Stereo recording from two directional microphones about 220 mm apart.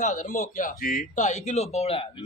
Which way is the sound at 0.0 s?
35° left (ahead or behind).